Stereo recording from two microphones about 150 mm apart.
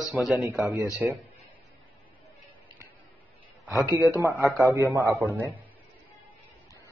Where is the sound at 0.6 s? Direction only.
20° right (ahead or behind).